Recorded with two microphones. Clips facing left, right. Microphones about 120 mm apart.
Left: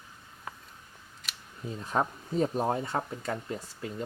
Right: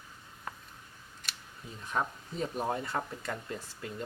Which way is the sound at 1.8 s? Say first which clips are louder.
Left 4 dB; 35° left (ahead or behind).